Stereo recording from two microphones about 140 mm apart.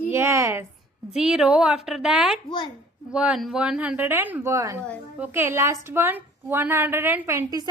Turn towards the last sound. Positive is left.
turn(degrees=-25)  # may be behind; listen again after turning